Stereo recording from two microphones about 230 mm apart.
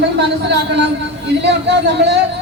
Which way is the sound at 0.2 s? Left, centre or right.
Right.